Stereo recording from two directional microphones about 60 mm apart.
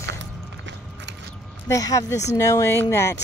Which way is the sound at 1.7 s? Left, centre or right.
Left.